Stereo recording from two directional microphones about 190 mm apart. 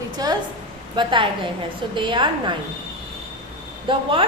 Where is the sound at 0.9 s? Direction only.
25° right (ahead or behind).